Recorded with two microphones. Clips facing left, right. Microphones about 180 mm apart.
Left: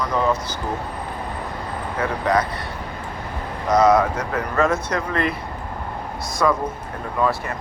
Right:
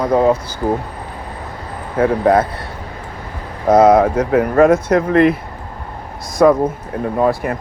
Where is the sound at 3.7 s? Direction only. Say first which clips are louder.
Right 6 dB; 55° right (ahead or behind).